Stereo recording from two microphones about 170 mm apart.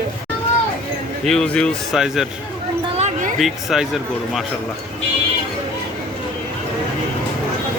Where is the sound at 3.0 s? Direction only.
45° right (ahead or behind).